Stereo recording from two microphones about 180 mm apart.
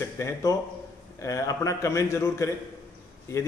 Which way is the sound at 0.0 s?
15° left (ahead or behind).